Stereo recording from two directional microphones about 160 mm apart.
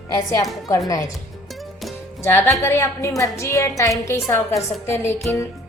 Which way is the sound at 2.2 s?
15° left (ahead or behind).